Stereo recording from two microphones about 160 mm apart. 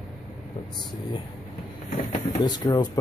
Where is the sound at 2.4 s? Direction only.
25° left (ahead or behind).